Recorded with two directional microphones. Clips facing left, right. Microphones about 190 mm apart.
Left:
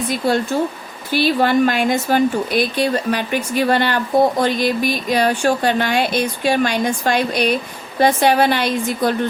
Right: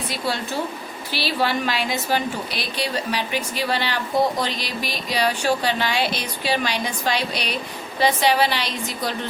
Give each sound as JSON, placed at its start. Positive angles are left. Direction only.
{"t": 0.1, "sound": "a woman's voice", "side_deg": 50}